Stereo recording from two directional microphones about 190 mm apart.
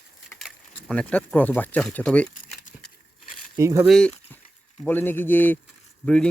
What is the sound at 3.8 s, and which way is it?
Speech, 5° left (ahead or behind).